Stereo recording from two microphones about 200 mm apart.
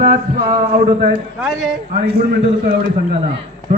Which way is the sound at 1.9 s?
50° right (ahead or behind).